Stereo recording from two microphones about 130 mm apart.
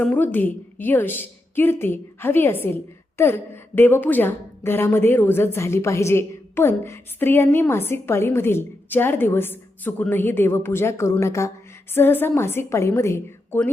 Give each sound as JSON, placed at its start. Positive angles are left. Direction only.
{"t": 0.0, "sound": "a woman's voice", "side_deg": 10}